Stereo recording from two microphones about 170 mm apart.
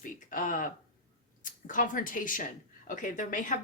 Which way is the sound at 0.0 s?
55° left (ahead or behind).